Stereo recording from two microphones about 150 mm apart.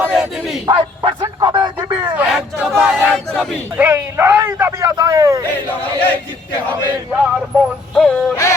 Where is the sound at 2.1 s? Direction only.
5° right (ahead or behind).